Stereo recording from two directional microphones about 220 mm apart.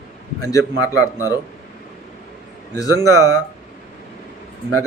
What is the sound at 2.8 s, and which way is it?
Speech, 15° left (ahead or behind).